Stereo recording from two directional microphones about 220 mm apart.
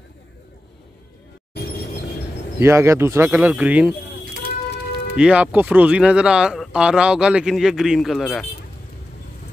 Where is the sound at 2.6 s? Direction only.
10° right (ahead or behind).